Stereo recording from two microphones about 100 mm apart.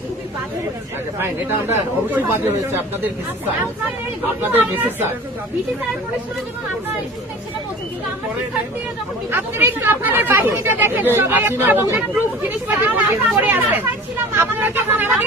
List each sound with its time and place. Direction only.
1.2 s speech: 20° right (ahead or behind)
4.4 s speech: 20° right (ahead or behind)
9.3 s speech: 20° right (ahead or behind)